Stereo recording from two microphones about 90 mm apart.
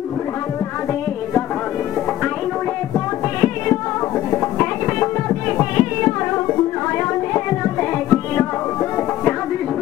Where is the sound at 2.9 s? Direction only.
35° left (ahead or behind).